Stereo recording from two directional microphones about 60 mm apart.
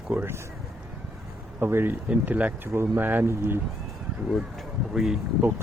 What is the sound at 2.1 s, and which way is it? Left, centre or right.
Speech, right.